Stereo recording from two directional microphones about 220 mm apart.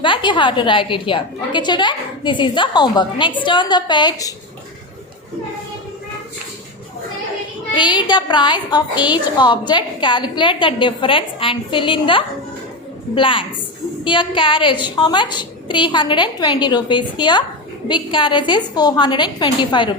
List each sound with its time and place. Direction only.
0.0 s a woman's voice: 20° left (ahead or behind)
7.7 s a woman's voice: 20° left (ahead or behind)